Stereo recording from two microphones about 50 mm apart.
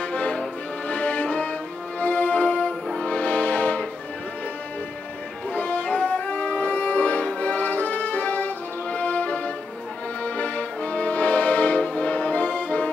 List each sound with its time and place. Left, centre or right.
0.0 s accordion: left
2.0 s music: left
5.5 s music: left